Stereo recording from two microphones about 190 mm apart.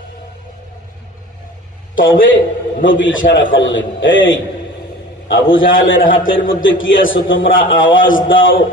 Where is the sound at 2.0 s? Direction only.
85° left.